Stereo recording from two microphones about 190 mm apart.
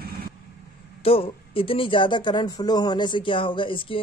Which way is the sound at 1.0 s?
30° left (ahead or behind).